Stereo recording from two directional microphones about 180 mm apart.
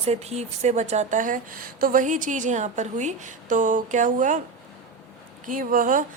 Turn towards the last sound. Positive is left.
turn(degrees=-50)  # may be behind; listen again after turning